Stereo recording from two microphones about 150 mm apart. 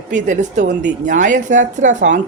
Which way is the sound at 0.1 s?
55° right (ahead or behind).